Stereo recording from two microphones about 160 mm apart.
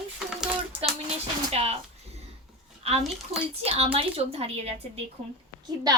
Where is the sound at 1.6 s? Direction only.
40° right (ahead or behind).